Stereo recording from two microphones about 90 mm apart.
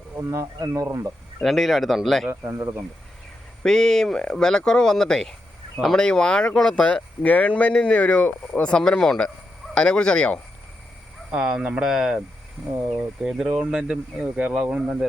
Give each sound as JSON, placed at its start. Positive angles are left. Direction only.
{"t": 0.2, "sound": "speech", "side_deg": -35}
{"t": 1.4, "sound": "speech", "side_deg": 0}
{"t": 2.3, "sound": "speech", "side_deg": -30}
{"t": 3.6, "sound": "speech", "side_deg": 5}
{"t": 11.3, "sound": "speech", "side_deg": -5}
{"t": 12.7, "sound": "speech", "side_deg": -20}
{"t": 13.2, "sound": "speech", "side_deg": -5}